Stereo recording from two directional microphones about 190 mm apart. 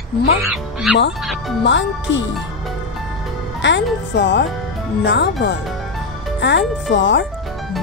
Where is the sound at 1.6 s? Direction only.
70° left (ahead or behind).